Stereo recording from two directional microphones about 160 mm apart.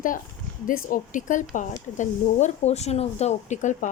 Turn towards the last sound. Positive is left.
turn(degrees=50)  # may be behind; listen again after turning